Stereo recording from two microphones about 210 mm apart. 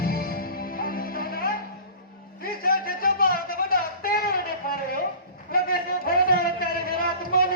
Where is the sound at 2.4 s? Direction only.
45° left (ahead or behind).